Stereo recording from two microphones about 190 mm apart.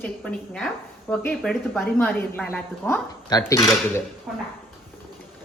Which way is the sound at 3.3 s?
20° left (ahead or behind).